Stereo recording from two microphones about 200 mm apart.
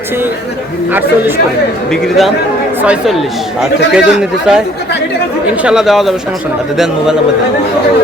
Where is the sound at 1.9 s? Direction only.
Centre (ahead or behind).